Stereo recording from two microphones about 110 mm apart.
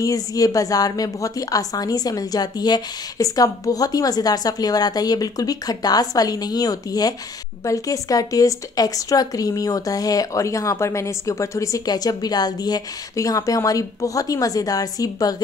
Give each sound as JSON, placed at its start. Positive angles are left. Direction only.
{"t": 0.0, "sound": "a woman's voice", "side_deg": 35}